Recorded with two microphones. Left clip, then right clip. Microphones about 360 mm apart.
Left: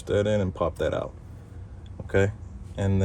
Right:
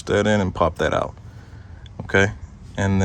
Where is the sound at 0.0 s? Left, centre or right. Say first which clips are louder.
Right 5 dB; right.